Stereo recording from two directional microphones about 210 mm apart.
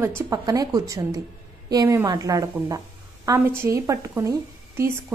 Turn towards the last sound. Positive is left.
turn(degrees=-10)  # may be behind; listen again after turning